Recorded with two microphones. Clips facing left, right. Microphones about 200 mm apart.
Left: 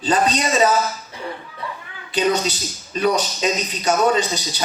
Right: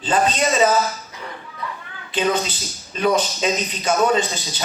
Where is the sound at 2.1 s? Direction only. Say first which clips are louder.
Left 2 dB; 40° left (ahead or behind).